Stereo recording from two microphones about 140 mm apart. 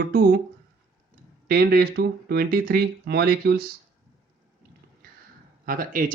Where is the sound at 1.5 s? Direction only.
90° right.